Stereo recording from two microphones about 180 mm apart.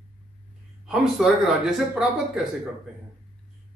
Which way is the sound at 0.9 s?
5° right (ahead or behind).